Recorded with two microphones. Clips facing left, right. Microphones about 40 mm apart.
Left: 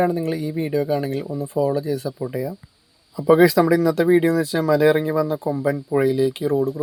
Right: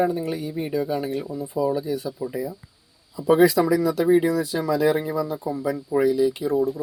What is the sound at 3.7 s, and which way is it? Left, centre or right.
Speech, left.